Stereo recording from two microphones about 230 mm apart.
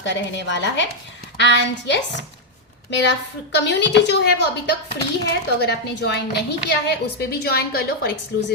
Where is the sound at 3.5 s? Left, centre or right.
Left.